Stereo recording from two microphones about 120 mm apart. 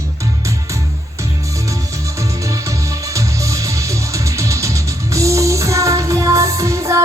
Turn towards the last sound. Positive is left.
turn(degrees=-25)  # may be behind; listen again after turning